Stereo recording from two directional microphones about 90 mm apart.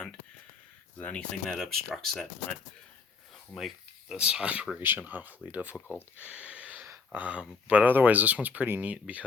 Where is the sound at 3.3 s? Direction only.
Centre (ahead or behind); by 5.7 s 20° right (ahead or behind).